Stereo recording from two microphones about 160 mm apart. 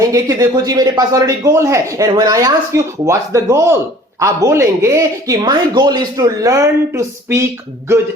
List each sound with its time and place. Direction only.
0.1 s speech: 20° right (ahead or behind)